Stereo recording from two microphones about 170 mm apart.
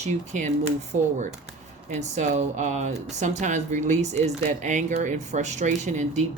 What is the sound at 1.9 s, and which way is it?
Speech, 45° right (ahead or behind).